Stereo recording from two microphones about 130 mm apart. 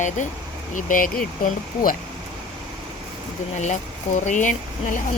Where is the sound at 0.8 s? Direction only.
90° left.